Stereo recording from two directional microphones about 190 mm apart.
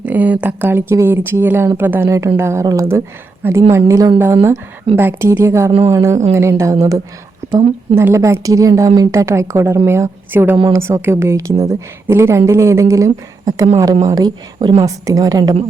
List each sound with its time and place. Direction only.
0.0 s a woman's voice: 10° right (ahead or behind)